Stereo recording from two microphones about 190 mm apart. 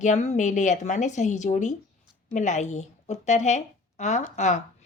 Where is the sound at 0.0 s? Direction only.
40° left (ahead or behind).